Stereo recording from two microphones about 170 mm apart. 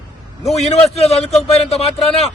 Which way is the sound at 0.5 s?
40° left (ahead or behind).